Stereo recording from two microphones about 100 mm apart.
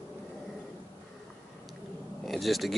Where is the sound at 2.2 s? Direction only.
Centre (ahead or behind).